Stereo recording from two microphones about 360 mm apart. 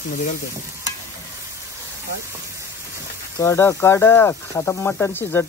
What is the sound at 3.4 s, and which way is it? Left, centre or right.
Speech, centre.